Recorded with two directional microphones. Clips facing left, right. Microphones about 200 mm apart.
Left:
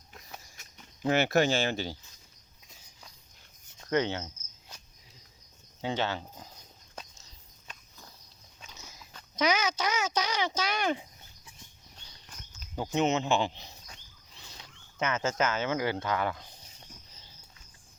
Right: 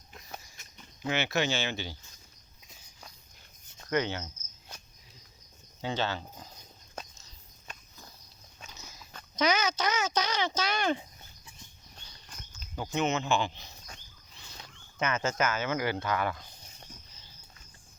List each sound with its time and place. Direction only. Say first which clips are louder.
1.0 s speech: left 5 dB; 40° left (ahead or behind)
1.6 s speech: left 4 dB; 35° left (ahead or behind)
3.8 s speech: left 2 dB; 25° left (ahead or behind)
5.8 s speech: left 1 dB; 20° left (ahead or behind)
9.3 s speech: even; 10° left (ahead or behind)
12.7 s speech: left 2 dB; 25° left (ahead or behind)
14.9 s speech: even; 20° left (ahead or behind)